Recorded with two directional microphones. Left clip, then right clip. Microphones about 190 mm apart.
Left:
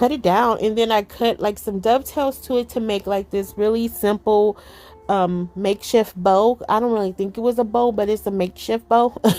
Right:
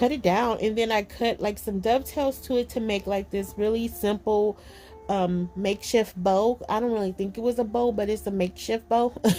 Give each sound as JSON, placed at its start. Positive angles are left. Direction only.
{"t": 0.0, "sound": "a woman's voice", "side_deg": 45}